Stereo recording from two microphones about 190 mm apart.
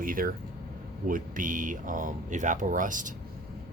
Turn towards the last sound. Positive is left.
turn(degrees=-45)  # may be behind; listen again after turning